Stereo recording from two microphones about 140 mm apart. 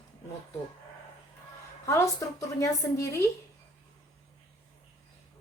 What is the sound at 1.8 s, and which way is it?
A woman's voice, 20° left (ahead or behind).